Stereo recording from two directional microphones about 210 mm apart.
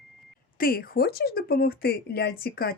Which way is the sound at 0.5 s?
45° left (ahead or behind).